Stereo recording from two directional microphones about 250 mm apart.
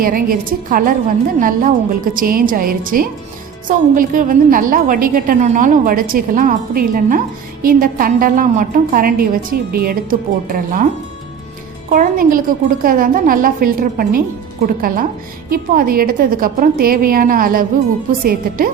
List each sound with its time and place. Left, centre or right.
0.0 s a woman's voice: right
11.9 s a woman's voice: right